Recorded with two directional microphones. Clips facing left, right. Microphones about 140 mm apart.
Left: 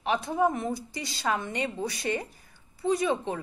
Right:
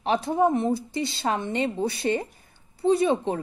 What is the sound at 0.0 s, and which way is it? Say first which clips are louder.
A woman's voice: right 4 dB; 30° right (ahead or behind).